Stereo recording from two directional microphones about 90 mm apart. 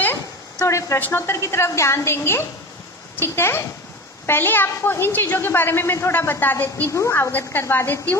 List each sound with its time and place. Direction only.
0.6 s a woman's voice: 35° left (ahead or behind)
0.9 s a woman's voice: 20° left (ahead or behind)
6.9 s a woman's voice: 30° left (ahead or behind)